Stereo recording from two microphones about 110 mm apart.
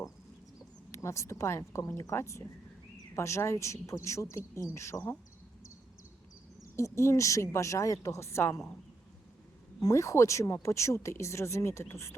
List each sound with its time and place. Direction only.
0.9 s speech: 25° left (ahead or behind)
6.6 s speech: 25° left (ahead or behind)
9.8 s speech: 30° left (ahead or behind)